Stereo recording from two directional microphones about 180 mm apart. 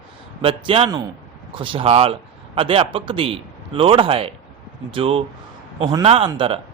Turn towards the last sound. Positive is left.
turn(degrees=-30)  # may be behind; listen again after turning